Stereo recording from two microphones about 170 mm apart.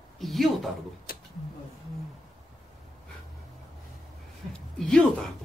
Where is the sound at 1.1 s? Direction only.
60° left (ahead or behind).